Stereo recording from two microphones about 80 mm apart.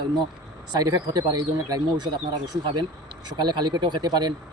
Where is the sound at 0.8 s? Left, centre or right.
Right.